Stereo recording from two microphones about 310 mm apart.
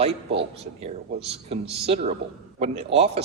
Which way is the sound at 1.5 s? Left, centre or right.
Centre.